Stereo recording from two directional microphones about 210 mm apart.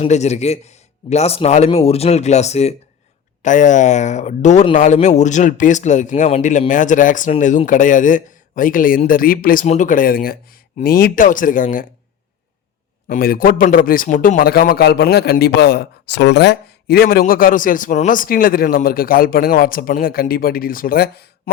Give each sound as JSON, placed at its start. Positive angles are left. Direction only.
{"t": 0.0, "sound": "speech", "side_deg": 30}
{"t": 13.1, "sound": "a man's voice", "side_deg": 45}